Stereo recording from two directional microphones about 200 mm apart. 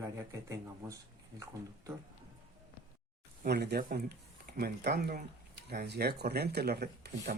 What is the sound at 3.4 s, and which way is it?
Speech, 55° right (ahead or behind).